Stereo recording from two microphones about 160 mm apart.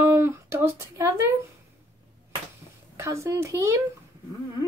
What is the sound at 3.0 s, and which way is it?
Speech, 15° right (ahead or behind).